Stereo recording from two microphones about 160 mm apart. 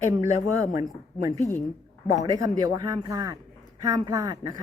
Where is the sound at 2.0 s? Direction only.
20° right (ahead or behind).